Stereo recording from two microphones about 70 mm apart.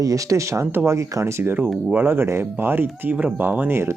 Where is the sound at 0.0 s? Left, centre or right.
Right.